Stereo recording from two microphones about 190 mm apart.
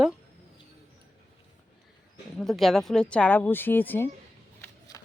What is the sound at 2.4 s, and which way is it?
Speech, centre (ahead or behind).